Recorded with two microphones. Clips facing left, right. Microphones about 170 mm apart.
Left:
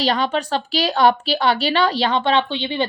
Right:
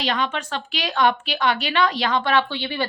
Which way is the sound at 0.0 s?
35° left (ahead or behind).